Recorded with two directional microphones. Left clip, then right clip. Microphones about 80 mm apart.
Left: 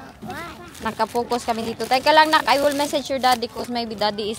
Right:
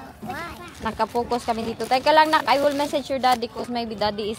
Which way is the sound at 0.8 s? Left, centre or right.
Centre.